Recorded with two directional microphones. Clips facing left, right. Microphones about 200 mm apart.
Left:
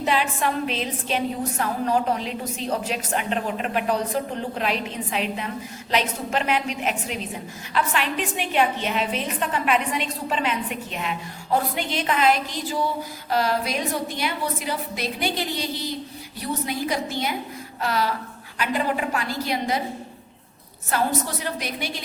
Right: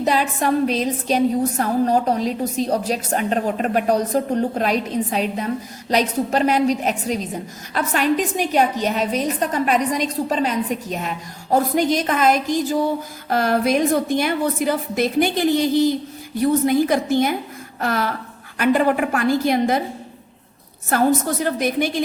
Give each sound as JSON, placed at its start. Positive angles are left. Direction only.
{"t": 0.0, "sound": "a woman's voice", "side_deg": -40}
{"t": 20.9, "sound": "a woman's voice", "side_deg": -50}